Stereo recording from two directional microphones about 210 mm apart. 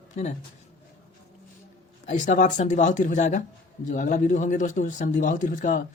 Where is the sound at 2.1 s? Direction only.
35° left (ahead or behind).